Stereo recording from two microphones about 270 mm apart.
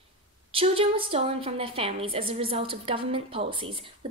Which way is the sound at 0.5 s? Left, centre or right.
Right.